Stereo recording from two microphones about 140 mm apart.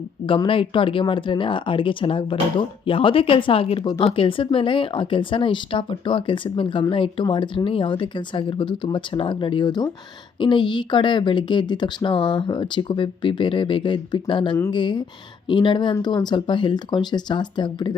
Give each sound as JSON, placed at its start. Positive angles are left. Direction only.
{"t": 0.3, "sound": "speech", "side_deg": 40}